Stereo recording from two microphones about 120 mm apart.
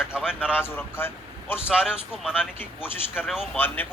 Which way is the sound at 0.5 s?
20° left (ahead or behind).